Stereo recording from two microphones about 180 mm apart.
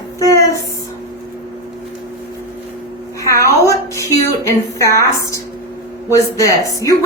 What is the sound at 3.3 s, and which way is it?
A woman's voice, 15° left (ahead or behind).